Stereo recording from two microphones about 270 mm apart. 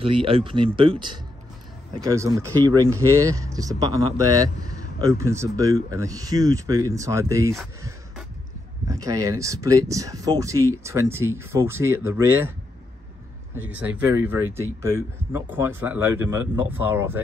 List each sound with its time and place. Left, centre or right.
0.0 s speech: centre
8.8 s speech: centre
13.6 s speech: centre